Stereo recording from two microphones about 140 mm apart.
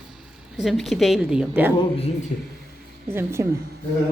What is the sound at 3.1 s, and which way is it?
Speech, 20° right (ahead or behind).